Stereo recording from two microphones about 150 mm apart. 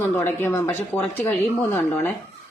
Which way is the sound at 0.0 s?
15° left (ahead or behind).